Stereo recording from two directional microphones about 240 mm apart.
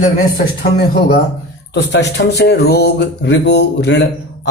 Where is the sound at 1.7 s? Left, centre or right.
Left.